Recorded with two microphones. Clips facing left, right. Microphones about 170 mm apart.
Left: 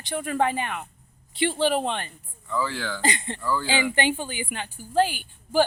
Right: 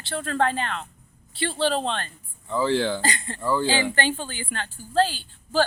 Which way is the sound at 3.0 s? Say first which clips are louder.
Left 2 dB; 20° left (ahead or behind).